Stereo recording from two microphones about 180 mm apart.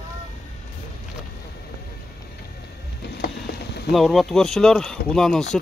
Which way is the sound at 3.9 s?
Centre (ahead or behind).